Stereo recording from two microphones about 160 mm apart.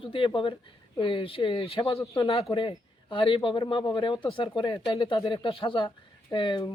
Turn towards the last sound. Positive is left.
turn(degrees=30)  # may be behind; listen again after turning